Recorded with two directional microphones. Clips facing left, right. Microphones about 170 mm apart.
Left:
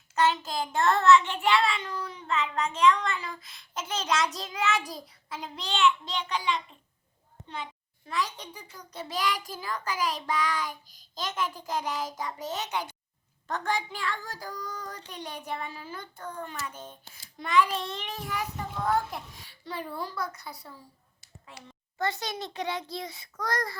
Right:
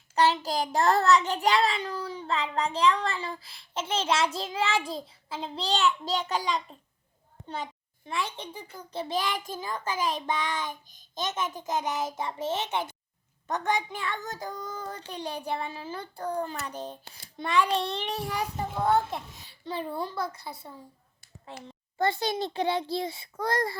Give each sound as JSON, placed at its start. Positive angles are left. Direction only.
{"t": 0.2, "sound": "child singing", "side_deg": -35}
{"t": 7.4, "sound": "a child's voice", "side_deg": -40}
{"t": 8.0, "sound": "a child's voice", "side_deg": -25}
{"t": 16.6, "sound": "child singing", "side_deg": -35}
{"t": 17.7, "sound": "a child's voice", "side_deg": -35}